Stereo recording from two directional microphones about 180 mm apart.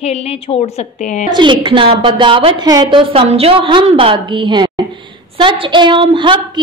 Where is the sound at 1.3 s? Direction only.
25° right (ahead or behind).